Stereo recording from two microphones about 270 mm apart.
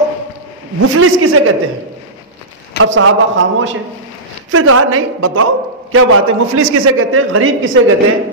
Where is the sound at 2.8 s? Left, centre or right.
Right.